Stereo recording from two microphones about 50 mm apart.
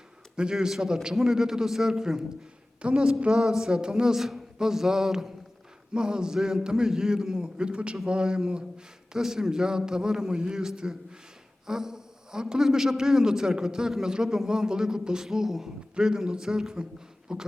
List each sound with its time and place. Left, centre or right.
0.3 s a man's voice: centre